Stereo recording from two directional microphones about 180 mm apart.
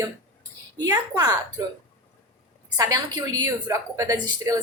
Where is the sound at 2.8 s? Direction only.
20° right (ahead or behind).